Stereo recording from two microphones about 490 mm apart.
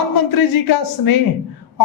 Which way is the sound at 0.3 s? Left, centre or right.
Left.